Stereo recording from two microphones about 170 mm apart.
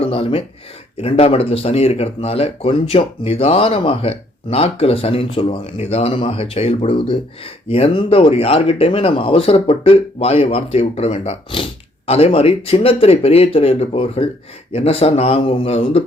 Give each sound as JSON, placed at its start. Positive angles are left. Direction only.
{"t": 0.0, "sound": "speech", "side_deg": 35}